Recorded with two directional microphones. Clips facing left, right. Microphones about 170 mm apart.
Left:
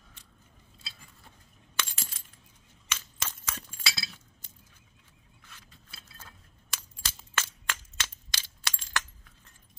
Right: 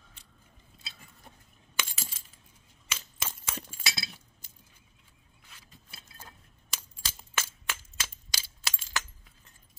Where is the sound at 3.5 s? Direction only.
20° right (ahead or behind).